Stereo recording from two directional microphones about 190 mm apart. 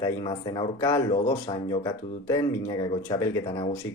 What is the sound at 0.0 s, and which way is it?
Speech, 20° left (ahead or behind).